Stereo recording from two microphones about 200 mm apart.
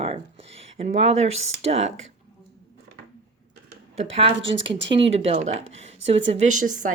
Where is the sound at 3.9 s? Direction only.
30° right (ahead or behind).